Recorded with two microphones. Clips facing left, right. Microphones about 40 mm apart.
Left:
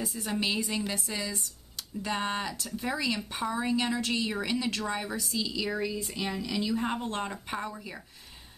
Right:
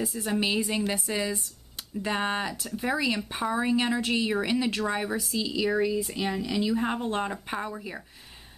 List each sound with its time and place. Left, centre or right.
0.0 s a woman's voice: centre
0.4 s speech: centre